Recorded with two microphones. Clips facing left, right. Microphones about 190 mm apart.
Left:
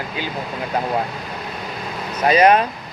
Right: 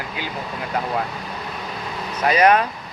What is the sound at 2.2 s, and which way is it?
Speech, 25° left (ahead or behind).